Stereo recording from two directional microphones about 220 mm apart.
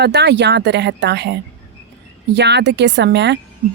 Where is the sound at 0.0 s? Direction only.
50° right (ahead or behind).